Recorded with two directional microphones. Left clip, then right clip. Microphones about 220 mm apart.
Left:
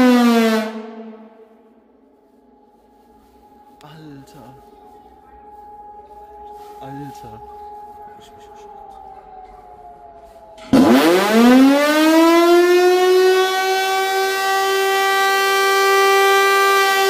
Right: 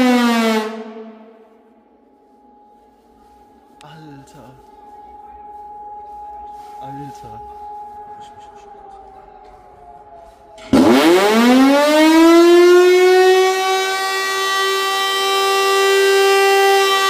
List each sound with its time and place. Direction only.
0.0 s music: centre (ahead or behind)
3.8 s a sound: centre (ahead or behind)
6.8 s speech: 10° left (ahead or behind)
8.2 s civil defense siren: 40° left (ahead or behind)
10.5 s civil defense siren: centre (ahead or behind)